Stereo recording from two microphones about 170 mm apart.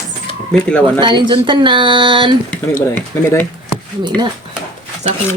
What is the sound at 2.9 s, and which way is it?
Speech, 10° left (ahead or behind).